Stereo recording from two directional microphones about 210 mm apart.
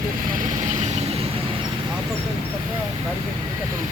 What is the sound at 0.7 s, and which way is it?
Vehicle, 35° right (ahead or behind).